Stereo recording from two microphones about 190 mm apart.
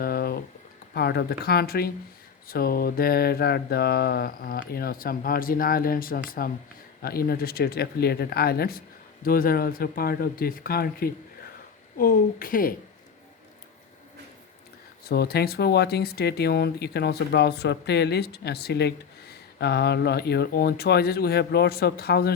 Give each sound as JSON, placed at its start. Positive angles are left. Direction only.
{"t": 0.0, "sound": "a sound", "side_deg": 55}
{"t": 0.9, "sound": "mantra", "side_deg": 60}
{"t": 15.0, "sound": "speech", "side_deg": 55}